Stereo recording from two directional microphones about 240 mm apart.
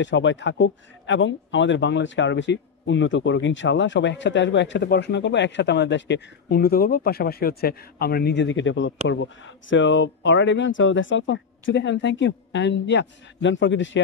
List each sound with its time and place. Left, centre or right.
0.0 s speech: left